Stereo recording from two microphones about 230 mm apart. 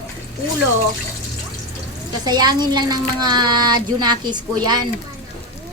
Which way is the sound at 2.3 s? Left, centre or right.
Centre.